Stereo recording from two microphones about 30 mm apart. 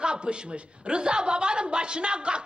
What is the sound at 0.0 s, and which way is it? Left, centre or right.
A man's voice, right.